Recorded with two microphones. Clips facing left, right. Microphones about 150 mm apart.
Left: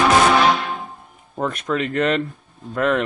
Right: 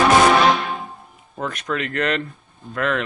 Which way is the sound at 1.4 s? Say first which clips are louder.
Left 3 dB; centre (ahead or behind).